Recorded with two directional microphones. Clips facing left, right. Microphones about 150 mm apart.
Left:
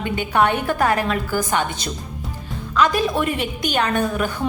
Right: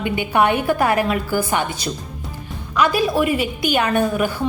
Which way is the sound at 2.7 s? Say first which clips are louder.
Right 1 dB; 10° right (ahead or behind).